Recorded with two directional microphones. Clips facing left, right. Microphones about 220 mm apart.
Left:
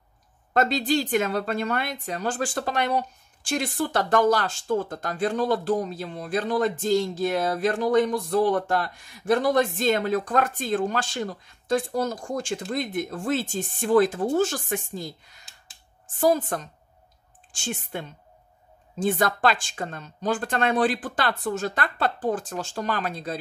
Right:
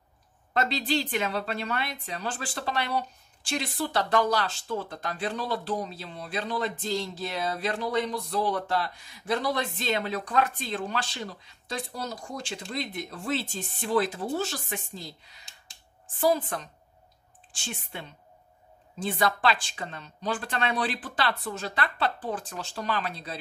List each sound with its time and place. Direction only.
0.5 s a woman's voice: 50° left (ahead or behind)